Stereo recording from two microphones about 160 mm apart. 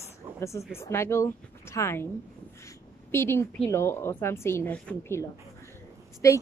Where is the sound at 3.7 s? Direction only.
15° left (ahead or behind).